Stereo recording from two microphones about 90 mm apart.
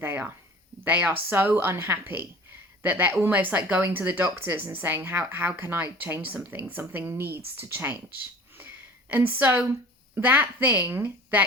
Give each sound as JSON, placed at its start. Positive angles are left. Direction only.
{"t": 0.0, "sound": "a woman's voice", "side_deg": -20}
{"t": 8.5, "sound": "a sound", "side_deg": -20}
{"t": 10.2, "sound": "a woman's voice", "side_deg": -20}